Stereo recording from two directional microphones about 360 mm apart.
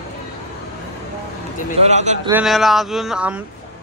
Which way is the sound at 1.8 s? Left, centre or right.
Centre.